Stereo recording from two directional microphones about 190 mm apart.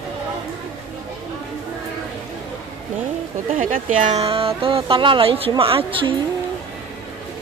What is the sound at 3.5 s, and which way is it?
Speech, 40° right (ahead or behind).